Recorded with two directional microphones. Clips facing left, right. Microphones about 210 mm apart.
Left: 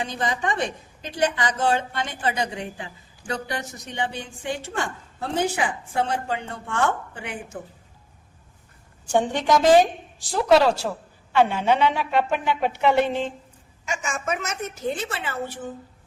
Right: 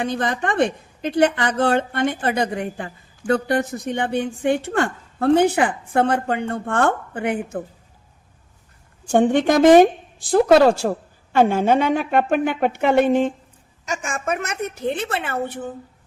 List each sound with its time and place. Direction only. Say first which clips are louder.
0.0 s a woman's voice: right 4 dB; 55° right (ahead or behind)
9.0 s a woman's voice: right 5 dB; 55° right (ahead or behind)